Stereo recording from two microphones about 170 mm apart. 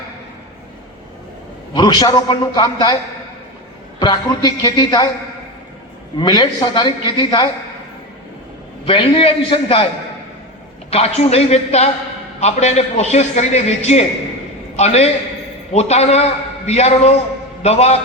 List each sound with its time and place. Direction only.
1.7 s a man's voice: 25° left (ahead or behind)
4.0 s a man's voice: 25° left (ahead or behind)
6.1 s a man's voice: 25° left (ahead or behind)
8.9 s a man's voice: 30° left (ahead or behind)
10.9 s a man's voice: 35° left (ahead or behind)